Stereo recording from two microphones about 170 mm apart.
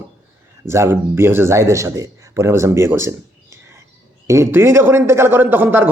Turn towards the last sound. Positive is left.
turn(degrees=-10)  # may be behind; listen again after turning